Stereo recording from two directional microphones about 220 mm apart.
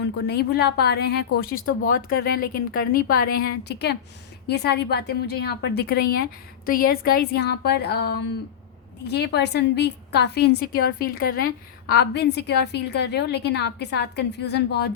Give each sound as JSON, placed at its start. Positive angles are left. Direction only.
{"t": 0.0, "sound": "a woman's voice", "side_deg": 50}